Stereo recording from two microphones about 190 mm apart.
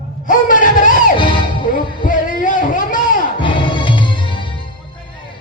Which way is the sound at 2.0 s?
45° left (ahead or behind).